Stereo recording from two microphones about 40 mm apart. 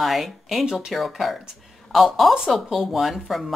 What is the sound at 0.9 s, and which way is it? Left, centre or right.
Speech, centre.